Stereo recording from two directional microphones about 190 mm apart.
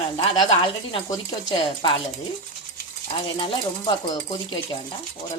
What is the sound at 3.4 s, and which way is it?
Speech, 25° left (ahead or behind).